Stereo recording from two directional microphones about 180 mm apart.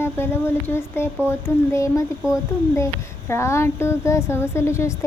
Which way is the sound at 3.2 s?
15° left (ahead or behind).